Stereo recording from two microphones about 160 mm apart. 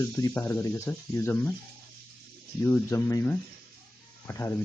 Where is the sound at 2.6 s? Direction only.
15° left (ahead or behind).